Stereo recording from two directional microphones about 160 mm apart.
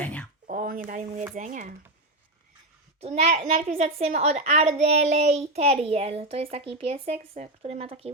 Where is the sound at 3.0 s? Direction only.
40° right (ahead or behind).